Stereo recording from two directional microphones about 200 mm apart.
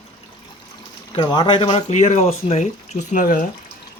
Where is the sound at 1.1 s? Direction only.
20° left (ahead or behind).